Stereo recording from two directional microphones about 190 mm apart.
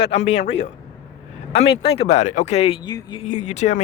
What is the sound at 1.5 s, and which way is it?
Speech, 30° left (ahead or behind).